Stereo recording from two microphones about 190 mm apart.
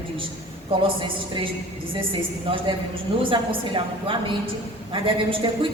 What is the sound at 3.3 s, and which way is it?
A woman's voice, 25° right (ahead or behind).